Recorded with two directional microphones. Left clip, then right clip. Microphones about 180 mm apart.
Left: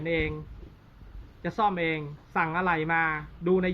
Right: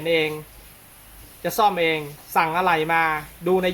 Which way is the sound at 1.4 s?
40° right (ahead or behind).